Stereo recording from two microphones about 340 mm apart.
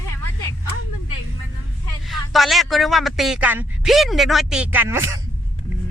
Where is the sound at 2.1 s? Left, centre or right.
Centre.